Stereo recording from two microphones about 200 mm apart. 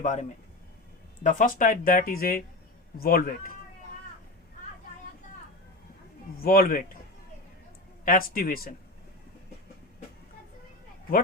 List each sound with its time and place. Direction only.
0.0 s speech: 35° left (ahead or behind)
6.4 s speech: 45° left (ahead or behind)
8.0 s speech: 45° left (ahead or behind)